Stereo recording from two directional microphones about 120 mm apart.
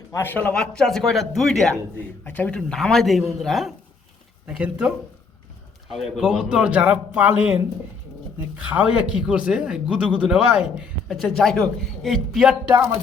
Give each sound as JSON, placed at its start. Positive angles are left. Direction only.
{"t": 0.1, "sound": "speech", "side_deg": 15}
{"t": 0.5, "sound": "speech", "side_deg": 5}
{"t": 2.0, "sound": "a man's voice", "side_deg": 15}